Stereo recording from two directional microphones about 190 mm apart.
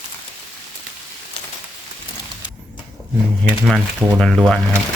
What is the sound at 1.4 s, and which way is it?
Rain on surface, 30° left (ahead or behind).